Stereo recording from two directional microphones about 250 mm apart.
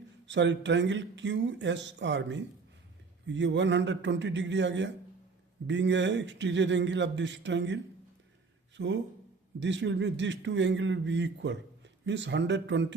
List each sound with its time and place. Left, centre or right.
0.3 s speech: right